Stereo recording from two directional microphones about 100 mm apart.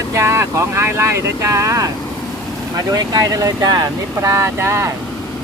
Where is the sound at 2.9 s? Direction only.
40° right (ahead or behind).